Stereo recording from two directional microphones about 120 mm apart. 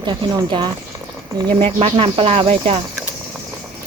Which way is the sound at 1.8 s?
50° right (ahead or behind).